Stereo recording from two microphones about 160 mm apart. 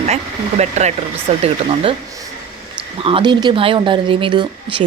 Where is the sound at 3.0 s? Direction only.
30° right (ahead or behind).